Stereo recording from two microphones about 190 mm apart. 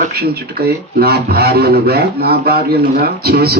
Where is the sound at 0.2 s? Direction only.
55° right (ahead or behind).